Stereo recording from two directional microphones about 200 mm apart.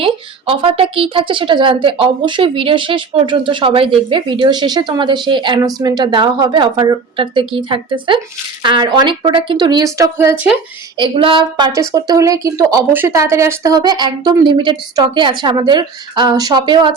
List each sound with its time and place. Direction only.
0.0 s speech: 25° right (ahead or behind)
10.9 s speech: 25° right (ahead or behind)